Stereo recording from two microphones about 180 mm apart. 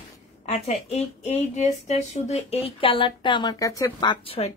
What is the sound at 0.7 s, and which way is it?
Speech, 35° left (ahead or behind).